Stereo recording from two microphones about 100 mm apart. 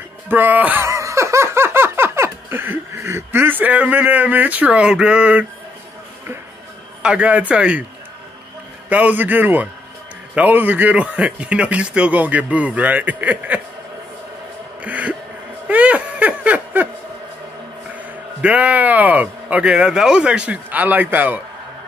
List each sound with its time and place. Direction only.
0.3 s speech: 20° right (ahead or behind)
7.0 s speech: 10° right (ahead or behind)
8.8 s speech: 15° right (ahead or behind)
14.8 s a sound: 15° right (ahead or behind)
17.9 s speech: 15° right (ahead or behind)